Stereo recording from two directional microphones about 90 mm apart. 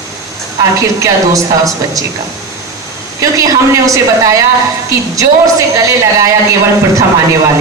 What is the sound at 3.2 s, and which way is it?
A woman's voice, 35° right (ahead or behind).